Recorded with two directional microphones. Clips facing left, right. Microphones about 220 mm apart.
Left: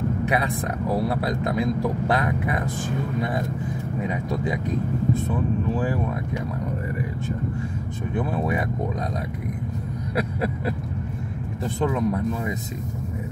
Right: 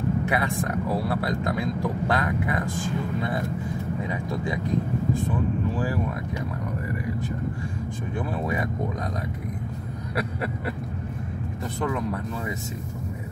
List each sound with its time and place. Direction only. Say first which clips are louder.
0.2 s a man's voice: left 1 dB; 20° left (ahead or behind)
8.1 s a man's voice: left 4 dB; 20° left (ahead or behind)
11.8 s a man's voice: left 4 dB; 20° left (ahead or behind)